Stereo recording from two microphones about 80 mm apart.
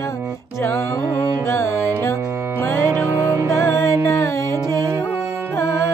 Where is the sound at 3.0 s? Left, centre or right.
Right.